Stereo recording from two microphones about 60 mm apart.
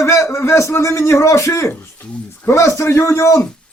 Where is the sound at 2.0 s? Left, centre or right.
Left.